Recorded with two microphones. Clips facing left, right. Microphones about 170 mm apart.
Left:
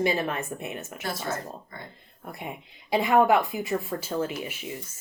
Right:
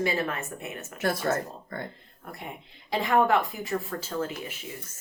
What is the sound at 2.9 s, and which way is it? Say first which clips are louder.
Speech: left 3 dB; 15° left (ahead or behind).